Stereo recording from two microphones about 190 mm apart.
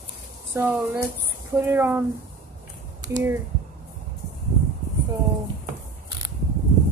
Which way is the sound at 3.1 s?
15° right (ahead or behind).